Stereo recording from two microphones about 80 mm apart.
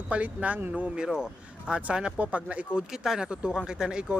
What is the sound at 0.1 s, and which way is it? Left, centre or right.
Speech, centre.